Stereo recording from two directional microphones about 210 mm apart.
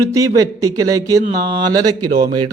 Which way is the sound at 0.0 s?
15° right (ahead or behind).